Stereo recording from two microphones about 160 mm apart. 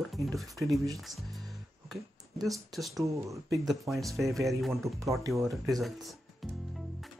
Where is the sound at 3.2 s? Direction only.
20° right (ahead or behind).